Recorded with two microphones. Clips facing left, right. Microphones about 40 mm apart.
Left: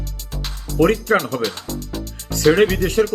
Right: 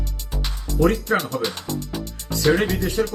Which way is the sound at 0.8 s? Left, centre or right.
Left.